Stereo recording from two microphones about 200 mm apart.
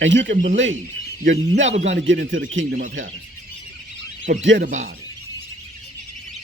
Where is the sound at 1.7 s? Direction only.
35° right (ahead or behind).